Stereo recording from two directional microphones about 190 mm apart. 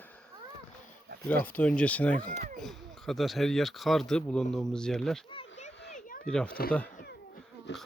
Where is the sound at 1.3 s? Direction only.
10° left (ahead or behind).